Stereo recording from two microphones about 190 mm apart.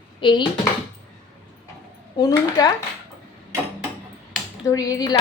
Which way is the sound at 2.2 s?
20° left (ahead or behind).